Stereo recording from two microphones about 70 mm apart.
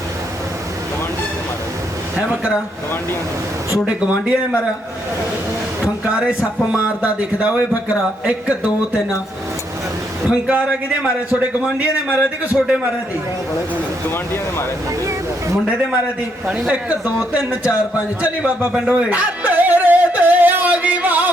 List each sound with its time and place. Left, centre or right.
3.8 s speech: centre
5.8 s speech: centre
10.4 s speech: centre
16.6 s speech: centre
17.3 s a sound: centre